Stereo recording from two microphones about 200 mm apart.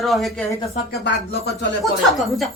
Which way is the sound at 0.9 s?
55° left (ahead or behind).